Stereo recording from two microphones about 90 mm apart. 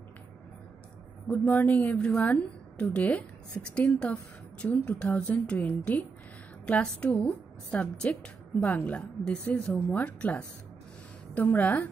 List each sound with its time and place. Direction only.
1.3 s a woman's voice: 20° left (ahead or behind)